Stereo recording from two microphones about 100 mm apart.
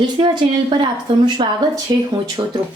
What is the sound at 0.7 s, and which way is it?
Speech, 50° right (ahead or behind).